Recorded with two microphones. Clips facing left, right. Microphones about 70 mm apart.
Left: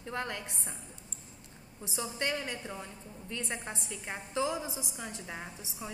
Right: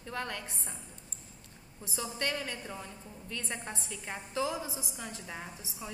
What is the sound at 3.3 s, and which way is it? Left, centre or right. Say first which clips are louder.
A woman's voice: left 1 dB; centre.